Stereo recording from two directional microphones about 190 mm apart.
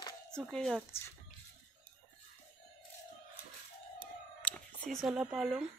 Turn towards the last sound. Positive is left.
turn(degrees=0)  # may be behind; listen again after turning